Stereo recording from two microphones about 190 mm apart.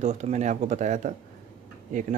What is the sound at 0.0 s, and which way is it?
A man's voice, 35° right (ahead or behind).